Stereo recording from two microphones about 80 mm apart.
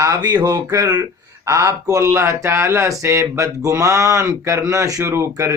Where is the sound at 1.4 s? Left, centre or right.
Right.